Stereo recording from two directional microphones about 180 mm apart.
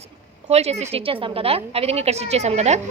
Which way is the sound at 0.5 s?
35° right (ahead or behind).